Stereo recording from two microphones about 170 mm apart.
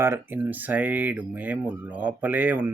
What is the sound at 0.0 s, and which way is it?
Speech, 15° right (ahead or behind).